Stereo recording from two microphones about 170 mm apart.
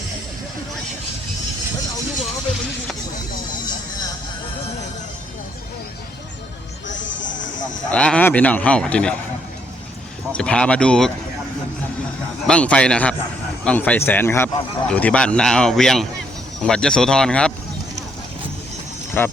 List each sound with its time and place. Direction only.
6.8 s music: 90° left
7.9 s speech: 5° left (ahead or behind)
10.3 s speech: 5° left (ahead or behind)
12.5 s speech: 5° left (ahead or behind)
19.2 s speech: 10° left (ahead or behind)